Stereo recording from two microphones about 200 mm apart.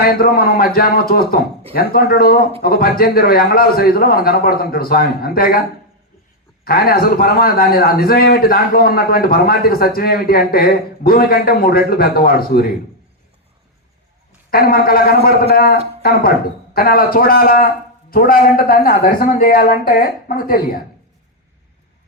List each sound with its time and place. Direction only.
0.0 s a man's voice: 50° left (ahead or behind)
6.7 s a man's voice: 50° left (ahead or behind)
14.5 s a man's voice: 50° left (ahead or behind)